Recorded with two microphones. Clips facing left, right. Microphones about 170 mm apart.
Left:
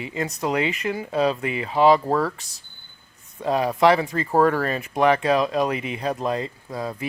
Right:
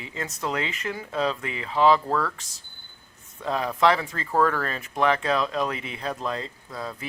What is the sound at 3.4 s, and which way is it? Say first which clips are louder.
Speech: left 4 dB; 15° left (ahead or behind).